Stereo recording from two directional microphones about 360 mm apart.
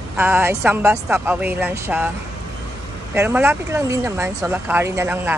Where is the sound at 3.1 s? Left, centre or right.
Centre.